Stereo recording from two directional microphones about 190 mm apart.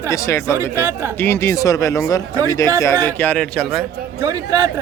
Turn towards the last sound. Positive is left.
turn(degrees=-15)  # may be behind; listen again after turning